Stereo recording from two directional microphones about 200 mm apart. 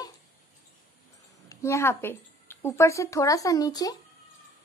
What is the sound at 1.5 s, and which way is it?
A woman's voice, 15° left (ahead or behind).